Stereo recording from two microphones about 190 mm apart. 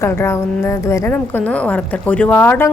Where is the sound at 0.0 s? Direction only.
15° left (ahead or behind).